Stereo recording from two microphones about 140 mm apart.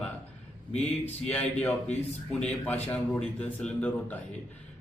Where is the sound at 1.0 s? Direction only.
10° left (ahead or behind).